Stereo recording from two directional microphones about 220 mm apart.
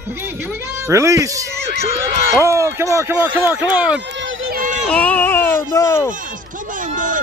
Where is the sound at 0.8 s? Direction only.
15° right (ahead or behind).